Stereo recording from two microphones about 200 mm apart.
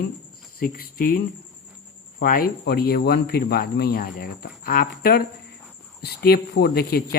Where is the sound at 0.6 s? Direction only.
45° left (ahead or behind).